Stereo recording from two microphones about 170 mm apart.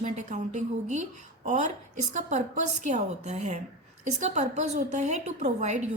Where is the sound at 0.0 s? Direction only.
45° right (ahead or behind).